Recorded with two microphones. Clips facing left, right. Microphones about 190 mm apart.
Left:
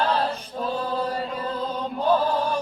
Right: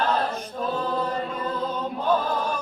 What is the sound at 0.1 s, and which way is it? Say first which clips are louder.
A capella: left 1 dB; 35° left (ahead or behind).